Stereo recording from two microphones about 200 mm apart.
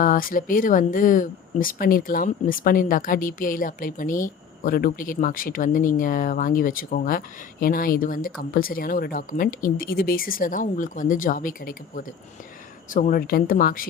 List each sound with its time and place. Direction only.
0.0 s speech: 45° left (ahead or behind)